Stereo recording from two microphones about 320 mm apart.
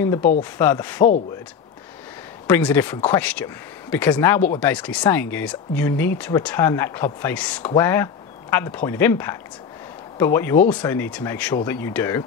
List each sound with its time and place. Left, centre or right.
0.0 s speech: centre
2.4 s speech: centre